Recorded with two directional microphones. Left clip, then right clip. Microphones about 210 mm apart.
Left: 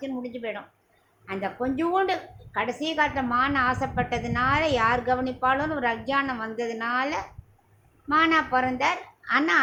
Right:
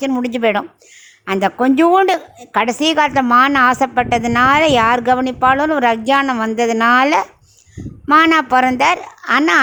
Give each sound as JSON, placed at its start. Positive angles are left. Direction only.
{"t": 0.0, "sound": "a woman's voice", "side_deg": -55}